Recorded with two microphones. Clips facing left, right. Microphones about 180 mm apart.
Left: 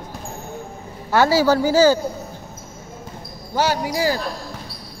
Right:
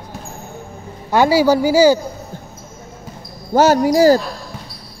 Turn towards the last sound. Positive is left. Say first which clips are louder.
# right 10 dB
turn(degrees=-45)  # may be behind; listen again after turning